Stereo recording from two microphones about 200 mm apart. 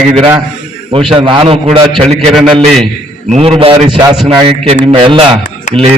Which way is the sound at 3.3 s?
30° right (ahead or behind).